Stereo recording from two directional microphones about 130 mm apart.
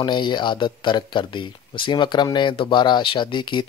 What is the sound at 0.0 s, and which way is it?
Speech, 35° left (ahead or behind).